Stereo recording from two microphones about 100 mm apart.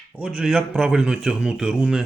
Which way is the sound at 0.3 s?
5° right (ahead or behind).